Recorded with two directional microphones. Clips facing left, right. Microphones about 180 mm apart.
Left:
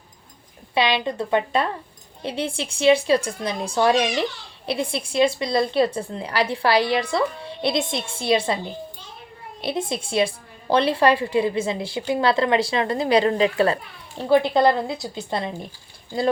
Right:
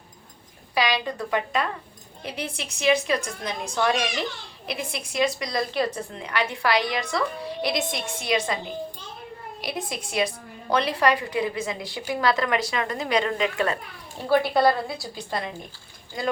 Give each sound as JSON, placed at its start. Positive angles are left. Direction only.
{"t": 0.7, "sound": "a woman's voice", "side_deg": 25}
{"t": 9.6, "sound": "a woman's voice", "side_deg": 25}
{"t": 14.3, "sound": "a woman's voice", "side_deg": 20}